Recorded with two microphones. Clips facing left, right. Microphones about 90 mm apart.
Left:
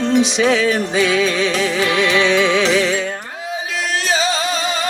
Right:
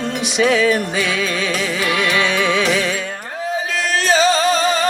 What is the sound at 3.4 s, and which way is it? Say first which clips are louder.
Music: right 3 dB; 40° right (ahead or behind).